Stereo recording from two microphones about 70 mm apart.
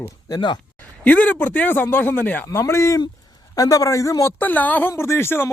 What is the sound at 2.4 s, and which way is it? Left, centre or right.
Speech, left.